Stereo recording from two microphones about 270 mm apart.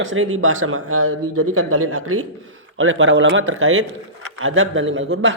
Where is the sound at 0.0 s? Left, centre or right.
Right.